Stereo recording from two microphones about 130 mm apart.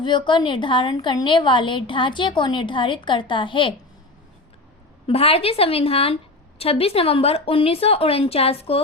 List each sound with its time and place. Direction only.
0.0 s a woman's voice: 35° left (ahead or behind)
5.0 s speech: 50° left (ahead or behind)